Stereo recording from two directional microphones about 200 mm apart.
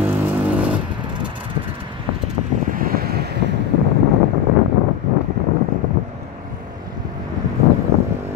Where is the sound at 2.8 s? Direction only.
50° right (ahead or behind).